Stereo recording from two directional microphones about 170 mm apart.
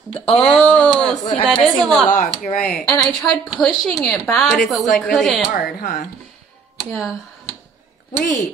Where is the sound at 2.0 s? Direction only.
45° left (ahead or behind).